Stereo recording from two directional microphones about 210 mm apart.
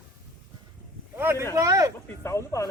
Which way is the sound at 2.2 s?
15° left (ahead or behind).